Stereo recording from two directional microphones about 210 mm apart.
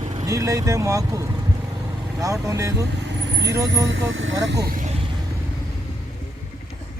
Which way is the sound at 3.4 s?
15° right (ahead or behind).